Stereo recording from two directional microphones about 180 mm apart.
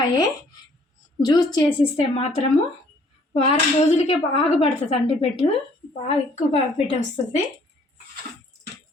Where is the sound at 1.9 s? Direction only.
35° left (ahead or behind).